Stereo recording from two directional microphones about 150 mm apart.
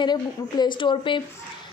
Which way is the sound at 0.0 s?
30° left (ahead or behind).